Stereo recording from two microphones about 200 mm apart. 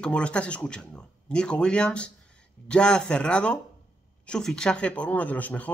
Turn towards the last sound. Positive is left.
turn(degrees=10)  # may be behind; listen again after turning